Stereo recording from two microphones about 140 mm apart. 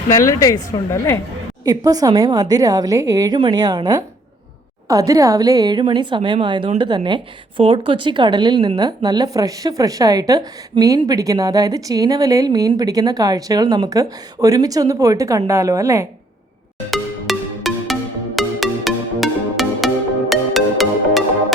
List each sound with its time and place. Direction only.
0.1 s a woman's voice: 20° left (ahead or behind)
1.6 s a woman's voice: 25° right (ahead or behind)
4.9 s a woman's voice: 25° right (ahead or behind)
16.9 s music: centre (ahead or behind)